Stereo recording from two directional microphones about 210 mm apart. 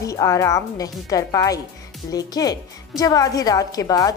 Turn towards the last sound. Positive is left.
turn(degrees=15)  # may be behind; listen again after turning